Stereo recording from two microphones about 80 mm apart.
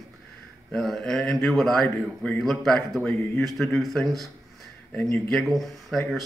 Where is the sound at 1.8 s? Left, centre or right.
Left.